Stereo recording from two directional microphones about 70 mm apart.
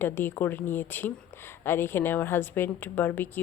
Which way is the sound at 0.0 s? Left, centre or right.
Left.